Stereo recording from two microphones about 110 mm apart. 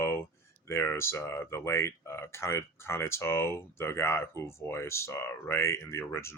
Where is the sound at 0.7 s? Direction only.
25° left (ahead or behind).